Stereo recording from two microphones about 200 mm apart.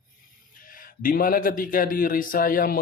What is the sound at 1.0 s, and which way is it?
Speech, 45° left (ahead or behind).